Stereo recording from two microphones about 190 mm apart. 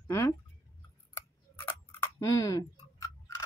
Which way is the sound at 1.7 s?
15° left (ahead or behind).